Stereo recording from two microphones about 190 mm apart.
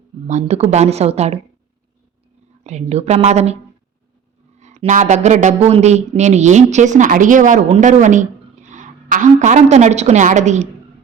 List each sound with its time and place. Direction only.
0.3 s speech: 40° right (ahead or behind)
2.6 s speech: 35° right (ahead or behind)
4.6 s a woman's voice: 35° right (ahead or behind)